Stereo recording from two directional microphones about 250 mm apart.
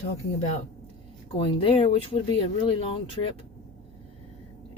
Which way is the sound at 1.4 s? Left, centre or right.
Left.